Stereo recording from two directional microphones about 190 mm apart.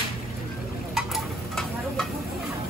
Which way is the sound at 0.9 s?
Centre (ahead or behind).